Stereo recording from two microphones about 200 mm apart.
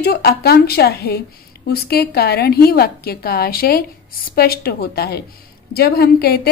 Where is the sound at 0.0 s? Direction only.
50° left (ahead or behind).